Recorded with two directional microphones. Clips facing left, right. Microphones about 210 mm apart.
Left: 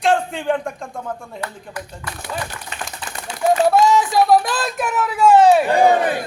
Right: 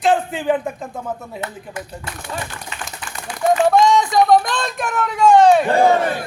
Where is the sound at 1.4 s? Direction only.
25° right (ahead or behind).